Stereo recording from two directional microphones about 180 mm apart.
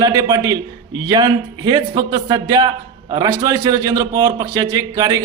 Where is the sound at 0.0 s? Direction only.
20° right (ahead or behind).